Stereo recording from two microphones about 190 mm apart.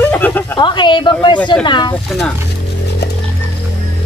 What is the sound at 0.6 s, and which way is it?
A man's voice, 25° left (ahead or behind).